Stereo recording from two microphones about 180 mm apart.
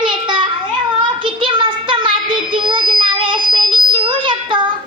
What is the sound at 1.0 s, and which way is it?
Child singing, 30° right (ahead or behind).